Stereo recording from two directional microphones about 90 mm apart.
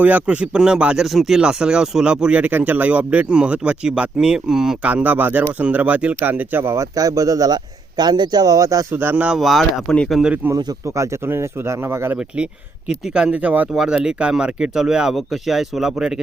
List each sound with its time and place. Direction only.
0.0 s speech: 15° right (ahead or behind)
4.9 s speech: 15° right (ahead or behind)
6.9 s a man's voice: 40° right (ahead or behind)
9.1 s speech: 15° right (ahead or behind)
9.4 s speech: centre (ahead or behind)
10.5 s a man's voice: 35° right (ahead or behind)
13.1 s speech: 10° right (ahead or behind)